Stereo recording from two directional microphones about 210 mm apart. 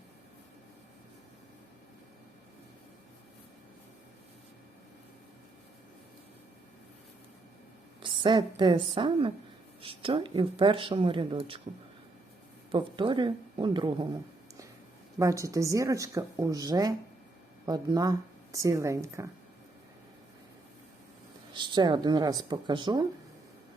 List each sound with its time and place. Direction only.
8.0 s speech: 20° right (ahead or behind)
12.7 s speech: 20° right (ahead or behind)
15.2 s speech: 15° right (ahead or behind)
21.5 s speech: 20° right (ahead or behind)